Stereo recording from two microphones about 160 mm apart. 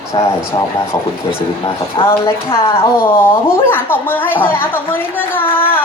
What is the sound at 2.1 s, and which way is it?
Speech, 15° left (ahead or behind).